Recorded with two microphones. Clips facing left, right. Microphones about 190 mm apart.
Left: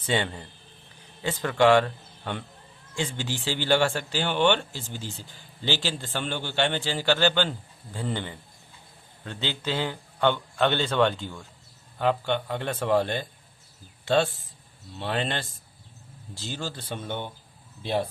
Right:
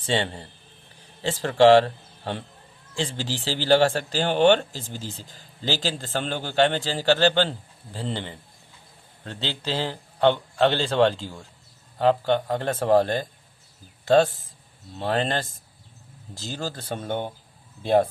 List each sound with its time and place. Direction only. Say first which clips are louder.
0.0 s a man's voice: right 2 dB; 30° right (ahead or behind)